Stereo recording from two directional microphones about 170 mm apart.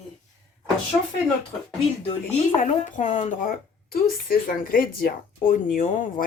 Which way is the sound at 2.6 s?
50° left (ahead or behind).